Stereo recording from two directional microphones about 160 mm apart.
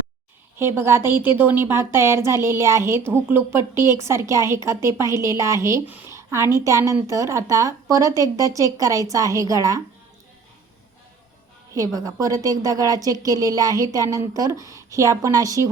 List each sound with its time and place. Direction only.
0.6 s a woman's voice: 15° right (ahead or behind)
11.9 s a woman's voice: 20° right (ahead or behind)